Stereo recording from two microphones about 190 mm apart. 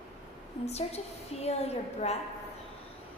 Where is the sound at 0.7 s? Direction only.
35° left (ahead or behind).